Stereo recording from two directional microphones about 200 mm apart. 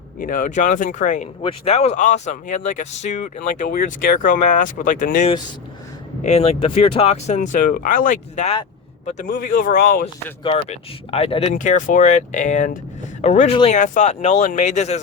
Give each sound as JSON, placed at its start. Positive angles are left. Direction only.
{"t": 0.2, "sound": "a man's voice", "side_deg": 45}
{"t": 10.4, "sound": "speech", "side_deg": 30}